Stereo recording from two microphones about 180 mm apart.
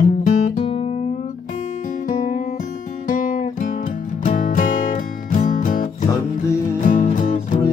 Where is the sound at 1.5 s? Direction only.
45° left (ahead or behind).